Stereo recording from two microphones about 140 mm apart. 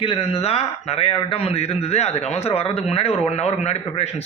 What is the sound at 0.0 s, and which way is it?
A man's voice, 45° left (ahead or behind).